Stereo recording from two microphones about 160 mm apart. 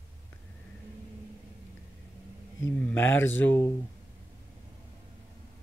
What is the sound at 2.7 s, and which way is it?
Speech, 10° left (ahead or behind).